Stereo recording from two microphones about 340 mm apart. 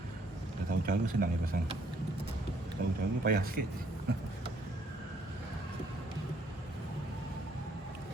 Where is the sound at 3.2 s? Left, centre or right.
Right.